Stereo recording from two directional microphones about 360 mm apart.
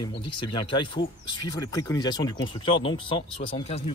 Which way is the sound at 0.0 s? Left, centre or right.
Centre.